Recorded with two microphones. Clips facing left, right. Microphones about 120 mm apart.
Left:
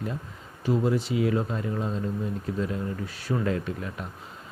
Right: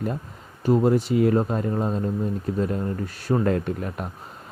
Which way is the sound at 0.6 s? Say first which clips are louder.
Right 5 dB; 50° right (ahead or behind).